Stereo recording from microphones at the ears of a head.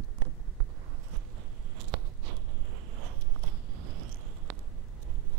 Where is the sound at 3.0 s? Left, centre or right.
Right.